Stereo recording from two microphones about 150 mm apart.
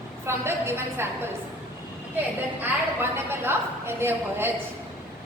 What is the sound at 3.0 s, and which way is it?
A woman's voice, 15° right (ahead or behind).